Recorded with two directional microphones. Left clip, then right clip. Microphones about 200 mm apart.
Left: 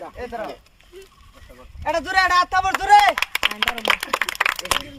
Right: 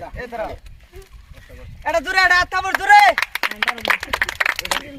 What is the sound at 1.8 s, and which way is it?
Speech, centre (ahead or behind).